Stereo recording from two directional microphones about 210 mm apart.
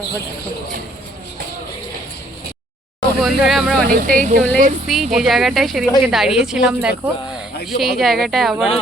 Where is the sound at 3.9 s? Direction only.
40° right (ahead or behind).